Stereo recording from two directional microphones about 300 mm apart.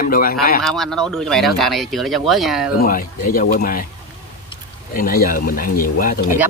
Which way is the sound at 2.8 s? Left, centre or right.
Left.